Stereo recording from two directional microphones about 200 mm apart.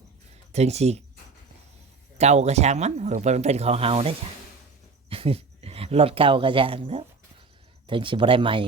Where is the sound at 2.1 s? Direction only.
35° right (ahead or behind).